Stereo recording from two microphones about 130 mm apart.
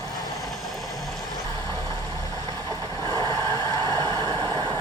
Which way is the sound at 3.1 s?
30° right (ahead or behind).